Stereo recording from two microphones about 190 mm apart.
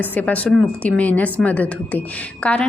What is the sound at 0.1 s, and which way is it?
A woman's voice, 10° left (ahead or behind).